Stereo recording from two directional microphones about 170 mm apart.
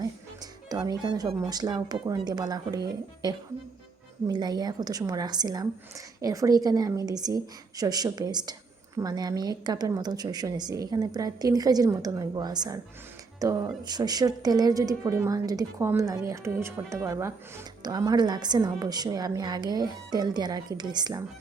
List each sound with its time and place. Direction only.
0.7 s a woman's voice: 20° right (ahead or behind)